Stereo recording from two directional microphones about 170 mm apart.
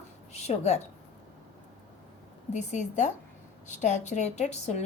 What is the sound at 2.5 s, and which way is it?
Speech, 45° left (ahead or behind).